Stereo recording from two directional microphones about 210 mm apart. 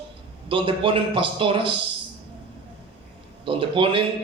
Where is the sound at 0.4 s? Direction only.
25° right (ahead or behind).